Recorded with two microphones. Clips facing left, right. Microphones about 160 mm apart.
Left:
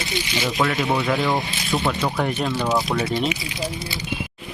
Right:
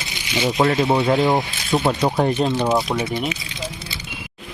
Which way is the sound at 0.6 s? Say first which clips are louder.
Right 5 dB; 30° right (ahead or behind).